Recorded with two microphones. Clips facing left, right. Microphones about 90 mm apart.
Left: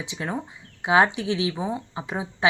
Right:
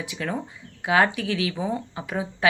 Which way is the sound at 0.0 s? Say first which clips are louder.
Right 1 dB; 20° left (ahead or behind).